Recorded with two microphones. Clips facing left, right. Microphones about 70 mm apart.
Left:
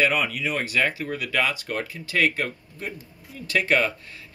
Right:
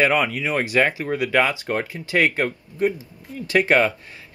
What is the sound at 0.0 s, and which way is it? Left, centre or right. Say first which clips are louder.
Speech: right 4 dB; right.